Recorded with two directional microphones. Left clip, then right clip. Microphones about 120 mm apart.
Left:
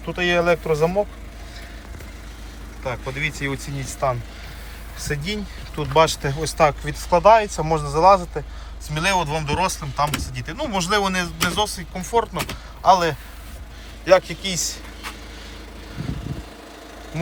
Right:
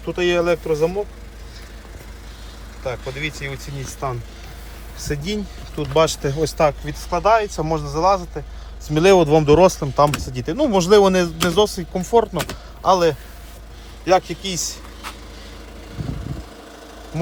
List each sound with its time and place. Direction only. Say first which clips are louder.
0.0 s speech: right 1 dB; 35° right (ahead or behind); by 1.0 s 20° right (ahead or behind)
2.8 s speech: even; 15° right (ahead or behind)
3.8 s speech: left 5 dB; 25° right (ahead or behind)
7.1 s speech: left 3 dB; 15° right (ahead or behind)
7.9 s speech: left 4 dB; centre (ahead or behind)
8.9 s speech: right 8 dB; 85° right; by 14.8 s 35° right (ahead or behind)